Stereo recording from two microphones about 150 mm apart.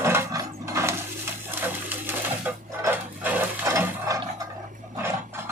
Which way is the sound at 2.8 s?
10° right (ahead or behind).